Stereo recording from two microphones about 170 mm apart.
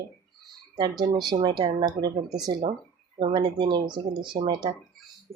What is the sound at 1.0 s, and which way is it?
Speech, 25° right (ahead or behind).